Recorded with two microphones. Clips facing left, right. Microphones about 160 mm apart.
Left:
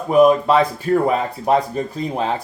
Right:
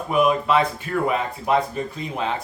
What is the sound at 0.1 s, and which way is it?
Speech, 35° left (ahead or behind).